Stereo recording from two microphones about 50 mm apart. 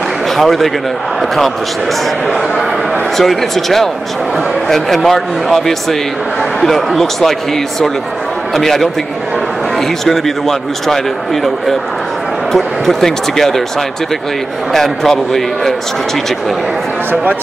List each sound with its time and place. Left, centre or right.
0.4 s speech: centre
3.2 s speech: centre
12.5 s speech: centre
14.7 s speech: centre
17.1 s speech: right